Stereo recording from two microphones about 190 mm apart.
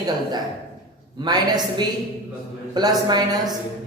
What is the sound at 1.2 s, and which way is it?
Speech, 20° right (ahead or behind).